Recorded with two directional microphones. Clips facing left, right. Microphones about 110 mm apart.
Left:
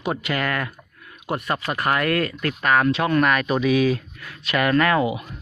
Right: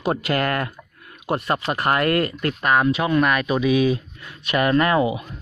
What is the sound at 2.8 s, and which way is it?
Speech, 10° right (ahead or behind).